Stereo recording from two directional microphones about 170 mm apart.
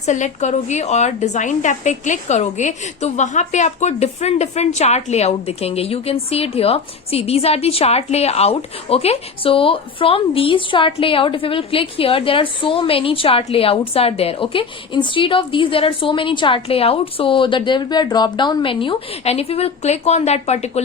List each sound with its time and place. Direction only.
0.0 s a woman's voice: 45° left (ahead or behind)